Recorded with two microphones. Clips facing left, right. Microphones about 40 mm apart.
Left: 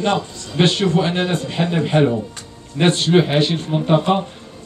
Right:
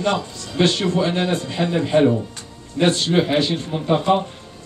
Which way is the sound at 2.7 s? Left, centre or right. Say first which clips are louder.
Left 2 dB; left.